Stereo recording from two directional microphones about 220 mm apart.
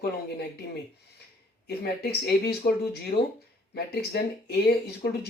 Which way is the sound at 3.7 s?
45° left (ahead or behind).